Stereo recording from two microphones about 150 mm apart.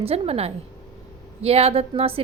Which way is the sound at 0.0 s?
40° right (ahead or behind).